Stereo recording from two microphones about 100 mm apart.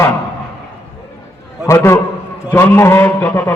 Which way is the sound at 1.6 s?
25° left (ahead or behind).